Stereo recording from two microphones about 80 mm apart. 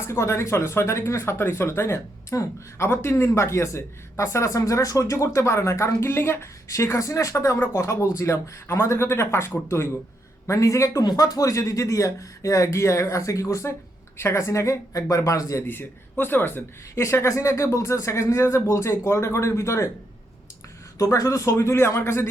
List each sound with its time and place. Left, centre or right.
0.0 s a man's voice: left
15.6 s speech: left
21.0 s speech: left